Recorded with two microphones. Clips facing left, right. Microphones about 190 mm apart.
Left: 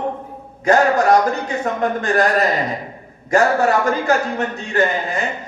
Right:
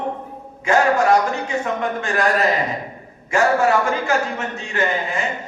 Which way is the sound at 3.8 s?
40° left (ahead or behind).